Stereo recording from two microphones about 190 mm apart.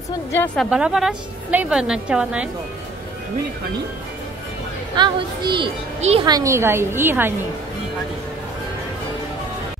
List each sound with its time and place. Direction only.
0.6 s a woman's voice: 5° right (ahead or behind)
4.9 s speech: 25° right (ahead or behind)
5.9 s speech: 35° right (ahead or behind)
6.2 s a woman's voice: 20° right (ahead or behind)